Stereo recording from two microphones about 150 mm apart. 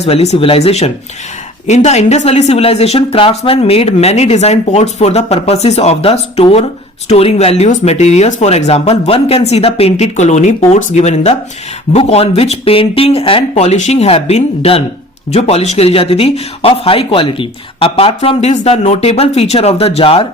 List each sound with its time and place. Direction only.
0.0 s speech: 45° left (ahead or behind)